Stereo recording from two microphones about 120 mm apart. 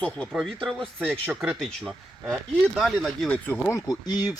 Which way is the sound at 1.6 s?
5° left (ahead or behind).